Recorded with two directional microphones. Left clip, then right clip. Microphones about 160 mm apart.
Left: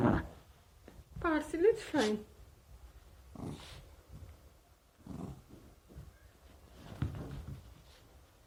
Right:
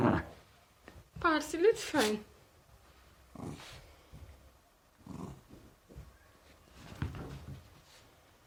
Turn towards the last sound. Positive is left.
turn(degrees=-5)  # may be behind; listen again after turning